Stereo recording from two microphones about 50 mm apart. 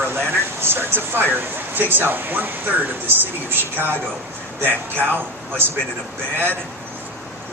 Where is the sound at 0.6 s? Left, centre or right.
Right.